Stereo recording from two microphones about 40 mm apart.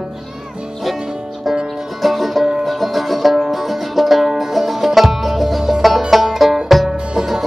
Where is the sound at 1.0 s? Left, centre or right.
Centre.